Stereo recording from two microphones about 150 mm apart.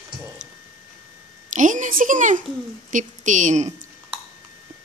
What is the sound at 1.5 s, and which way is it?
A child's voice, 55° right (ahead or behind).